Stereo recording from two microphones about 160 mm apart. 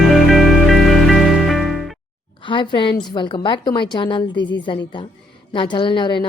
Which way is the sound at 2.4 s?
30° left (ahead or behind).